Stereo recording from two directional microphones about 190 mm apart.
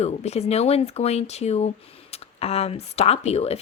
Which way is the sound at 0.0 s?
35° left (ahead or behind).